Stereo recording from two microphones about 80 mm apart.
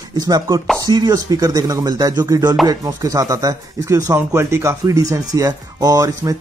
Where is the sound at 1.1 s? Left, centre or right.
Right.